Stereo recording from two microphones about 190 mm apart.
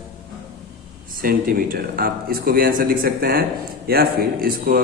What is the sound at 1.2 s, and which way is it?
A man's voice, 50° right (ahead or behind).